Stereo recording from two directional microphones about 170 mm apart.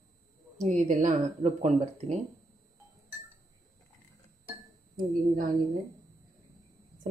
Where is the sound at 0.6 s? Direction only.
45° right (ahead or behind).